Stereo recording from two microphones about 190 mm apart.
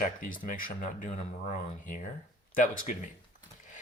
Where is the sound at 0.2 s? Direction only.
45° left (ahead or behind).